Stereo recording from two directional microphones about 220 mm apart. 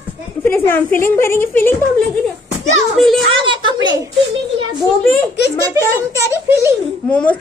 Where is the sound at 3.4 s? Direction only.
20° right (ahead or behind).